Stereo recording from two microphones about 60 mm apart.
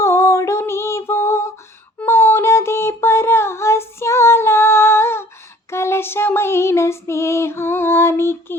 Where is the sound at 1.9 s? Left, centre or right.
Left.